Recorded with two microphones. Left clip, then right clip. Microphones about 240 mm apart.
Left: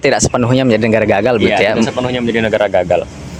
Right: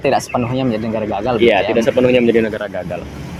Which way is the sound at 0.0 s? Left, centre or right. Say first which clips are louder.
Left 3 dB; left.